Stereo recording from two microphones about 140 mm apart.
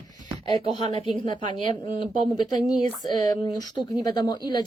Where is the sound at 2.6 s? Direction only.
Centre (ahead or behind).